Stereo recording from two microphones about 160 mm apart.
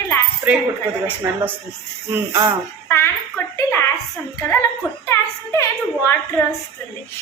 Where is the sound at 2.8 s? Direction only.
15° left (ahead or behind).